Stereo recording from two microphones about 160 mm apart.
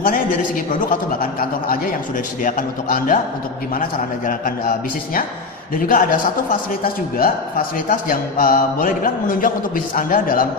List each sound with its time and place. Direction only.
0.9 s speech: 65° left (ahead or behind)
4.3 s speech: 60° left (ahead or behind)
5.7 s speech: 60° left (ahead or behind)